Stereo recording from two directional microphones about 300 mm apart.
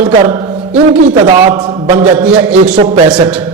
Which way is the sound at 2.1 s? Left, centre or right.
Centre.